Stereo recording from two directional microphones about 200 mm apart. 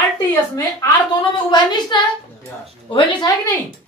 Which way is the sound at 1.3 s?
25° left (ahead or behind).